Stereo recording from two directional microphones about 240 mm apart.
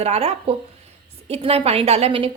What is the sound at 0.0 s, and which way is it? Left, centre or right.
A woman's voice, right.